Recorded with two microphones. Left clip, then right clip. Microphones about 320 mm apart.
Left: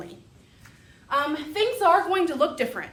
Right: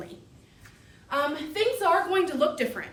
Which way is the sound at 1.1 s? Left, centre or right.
Centre.